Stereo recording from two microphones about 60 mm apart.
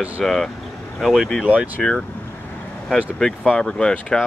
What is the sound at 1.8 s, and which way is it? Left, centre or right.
Speech, centre.